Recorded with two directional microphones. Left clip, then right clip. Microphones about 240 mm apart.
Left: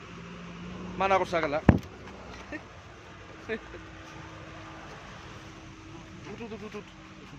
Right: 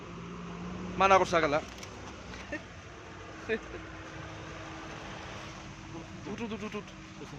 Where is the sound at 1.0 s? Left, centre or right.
Centre.